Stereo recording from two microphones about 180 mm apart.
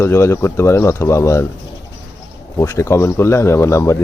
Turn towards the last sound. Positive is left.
turn(degrees=15)  # may be behind; listen again after turning